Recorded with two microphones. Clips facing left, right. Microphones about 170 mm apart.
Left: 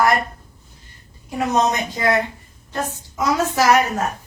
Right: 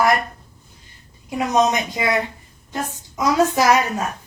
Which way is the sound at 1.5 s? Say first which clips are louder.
Right 2 dB; 10° right (ahead or behind).